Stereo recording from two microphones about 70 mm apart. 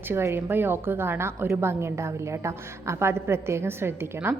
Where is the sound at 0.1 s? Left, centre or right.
Right.